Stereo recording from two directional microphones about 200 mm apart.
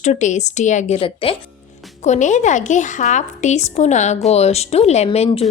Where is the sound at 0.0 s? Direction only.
35° left (ahead or behind).